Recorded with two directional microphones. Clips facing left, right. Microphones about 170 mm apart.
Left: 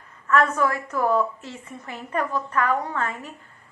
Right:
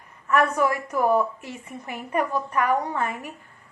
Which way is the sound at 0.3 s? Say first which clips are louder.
Even; 15° right (ahead or behind).